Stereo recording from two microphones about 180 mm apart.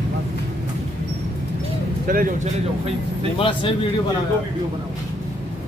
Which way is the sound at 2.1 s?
50° right (ahead or behind).